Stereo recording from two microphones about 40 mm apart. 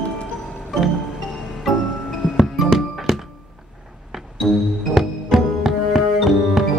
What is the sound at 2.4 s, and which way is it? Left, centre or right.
Music, centre.